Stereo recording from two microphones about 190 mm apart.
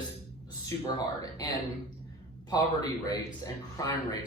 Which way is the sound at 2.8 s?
20° left (ahead or behind).